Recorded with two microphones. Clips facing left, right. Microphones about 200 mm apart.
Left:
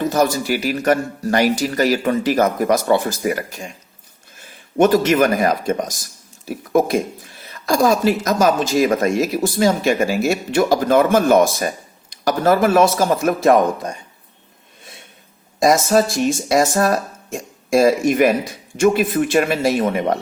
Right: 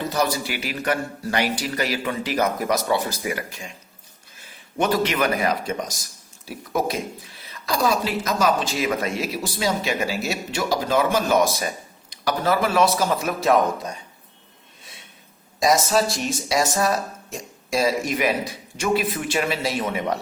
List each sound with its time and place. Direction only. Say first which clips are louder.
0.0 s speech: left 6 dB; 45° left (ahead or behind)
4.8 s speech: left 8 dB; 45° left (ahead or behind)
15.6 s speech: left 5 dB; 50° left (ahead or behind)